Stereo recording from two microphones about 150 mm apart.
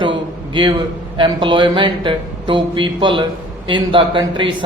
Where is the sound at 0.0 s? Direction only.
35° right (ahead or behind).